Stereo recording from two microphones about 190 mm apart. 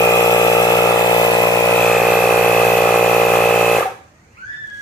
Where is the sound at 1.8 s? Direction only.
Centre (ahead or behind).